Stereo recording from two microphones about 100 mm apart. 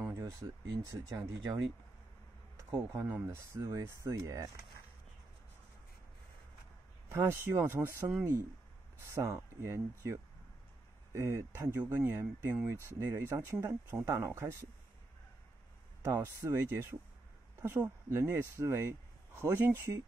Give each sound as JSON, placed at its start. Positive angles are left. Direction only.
{"t": 0.0, "sound": "speech", "side_deg": -25}
{"t": 2.7, "sound": "speech", "side_deg": -30}
{"t": 3.5, "sound": "speech", "side_deg": -35}
{"t": 7.1, "sound": "speech", "side_deg": -25}
{"t": 16.0, "sound": "speech", "side_deg": -30}